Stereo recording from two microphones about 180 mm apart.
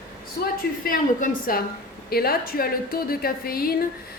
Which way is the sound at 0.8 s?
50° left (ahead or behind).